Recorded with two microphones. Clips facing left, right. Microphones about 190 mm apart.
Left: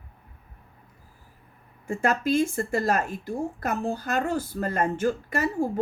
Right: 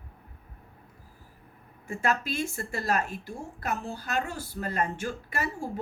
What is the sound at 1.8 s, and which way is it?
Speech, 50° left (ahead or behind).